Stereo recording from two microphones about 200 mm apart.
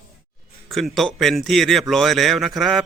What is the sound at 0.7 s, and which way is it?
Speech, centre (ahead or behind).